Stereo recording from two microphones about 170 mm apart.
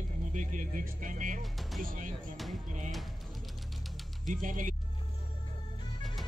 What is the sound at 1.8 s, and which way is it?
Speech, 50° right (ahead or behind).